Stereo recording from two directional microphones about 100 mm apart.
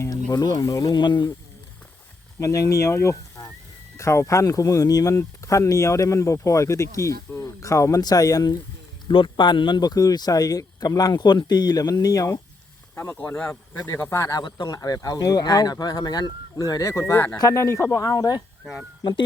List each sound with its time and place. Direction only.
0.0 s a sound: 30° left (ahead or behind)
0.3 s speech: 40° left (ahead or behind)
0.9 s speech: 50° left (ahead or behind)
2.4 s speech: 30° left (ahead or behind)
9.0 s speech: 50° left (ahead or behind)
13.0 s speech: 20° left (ahead or behind)
13.7 s speech: 30° left (ahead or behind)
17.3 s speech: 35° left (ahead or behind)
17.9 s speech: 40° left (ahead or behind)